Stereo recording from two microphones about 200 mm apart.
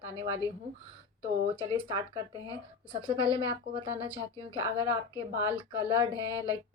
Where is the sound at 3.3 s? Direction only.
25° right (ahead or behind).